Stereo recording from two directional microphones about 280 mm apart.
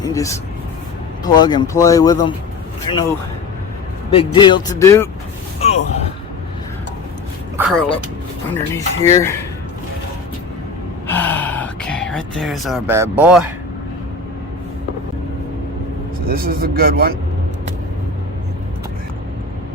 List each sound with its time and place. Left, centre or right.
0.0 s speech: centre
4.1 s speech: centre
5.5 s a sound: left
7.5 s speech: centre
8.7 s speech: centre
11.0 s gasp: centre
16.2 s speech: right